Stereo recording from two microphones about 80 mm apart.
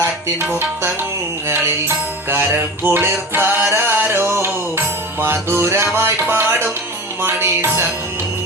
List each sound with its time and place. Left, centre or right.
2.3 s music: right